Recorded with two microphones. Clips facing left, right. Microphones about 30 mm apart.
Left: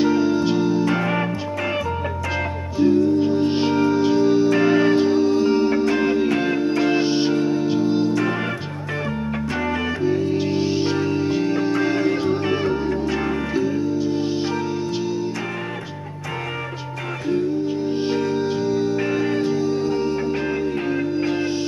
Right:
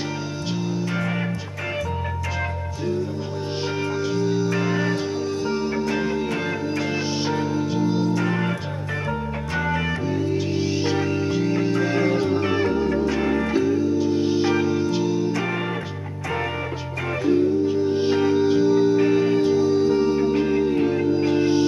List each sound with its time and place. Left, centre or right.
0.0 s music: centre
2.8 s music: centre
8.1 s music: centre
10.9 s music: centre
13.7 s music: centre
17.8 s music: centre